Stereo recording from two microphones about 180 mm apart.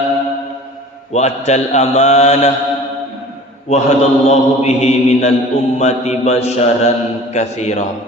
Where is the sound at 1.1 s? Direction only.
40° left (ahead or behind).